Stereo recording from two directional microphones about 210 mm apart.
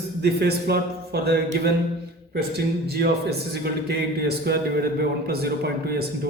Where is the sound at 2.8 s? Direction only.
50° right (ahead or behind).